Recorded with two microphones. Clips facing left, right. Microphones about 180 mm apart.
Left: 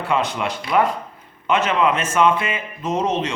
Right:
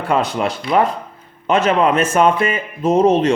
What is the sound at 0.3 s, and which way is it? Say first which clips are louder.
Speech: right 5 dB; 30° right (ahead or behind).